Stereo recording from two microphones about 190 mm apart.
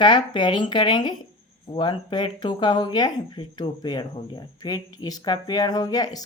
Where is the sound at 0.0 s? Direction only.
25° left (ahead or behind).